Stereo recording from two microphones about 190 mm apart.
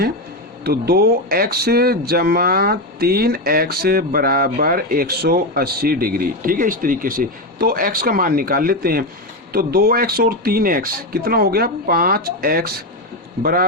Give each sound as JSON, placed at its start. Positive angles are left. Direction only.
{"t": 0.6, "sound": "speech", "side_deg": -55}